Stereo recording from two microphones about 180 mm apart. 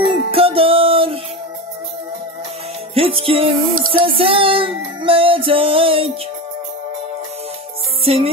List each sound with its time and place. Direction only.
0.1 s music: 30° right (ahead or behind)
2.9 s music: 30° right (ahead or behind)
3.7 s music: 50° right (ahead or behind)
4.0 s music: 30° right (ahead or behind)
8.0 s music: 30° right (ahead or behind)